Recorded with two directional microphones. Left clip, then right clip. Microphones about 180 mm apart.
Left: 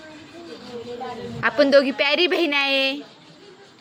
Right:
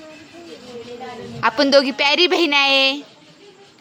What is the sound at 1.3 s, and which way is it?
A woman's voice, 20° right (ahead or behind).